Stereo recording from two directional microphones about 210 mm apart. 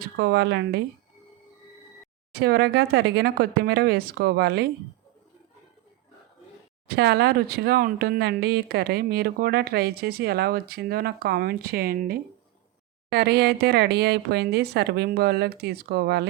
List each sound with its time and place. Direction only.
0.2 s speech: 50° right (ahead or behind)
2.3 s speech: 50° right (ahead or behind)
6.8 s speech: 50° right (ahead or behind)